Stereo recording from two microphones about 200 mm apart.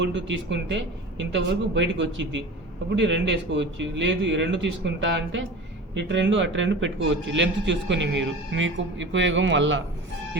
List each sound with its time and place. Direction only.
0.0 s a man's voice: 65° right (ahead or behind)